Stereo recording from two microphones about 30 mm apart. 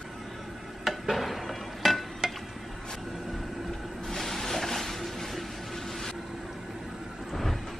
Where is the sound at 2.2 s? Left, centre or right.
Right.